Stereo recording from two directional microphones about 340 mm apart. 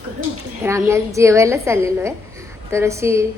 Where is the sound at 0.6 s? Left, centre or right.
Centre.